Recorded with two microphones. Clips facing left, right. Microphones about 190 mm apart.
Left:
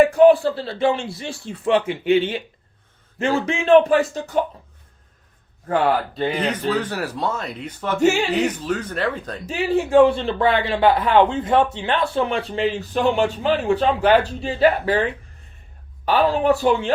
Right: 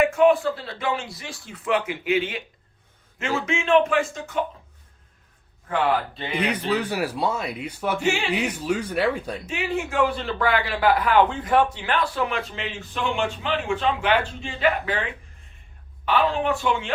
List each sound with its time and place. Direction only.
0.0 s speech: 35° left (ahead or behind)
5.6 s speech: 40° left (ahead or behind)
6.7 s speech: 10° right (ahead or behind)
8.0 s speech: 40° left (ahead or behind)
8.3 s speech: 10° right (ahead or behind)
9.5 s speech: 35° left (ahead or behind)